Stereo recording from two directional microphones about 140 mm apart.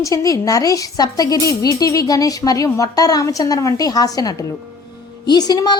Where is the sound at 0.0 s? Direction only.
25° left (ahead or behind).